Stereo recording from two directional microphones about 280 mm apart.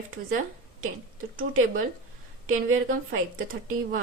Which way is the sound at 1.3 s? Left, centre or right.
Right.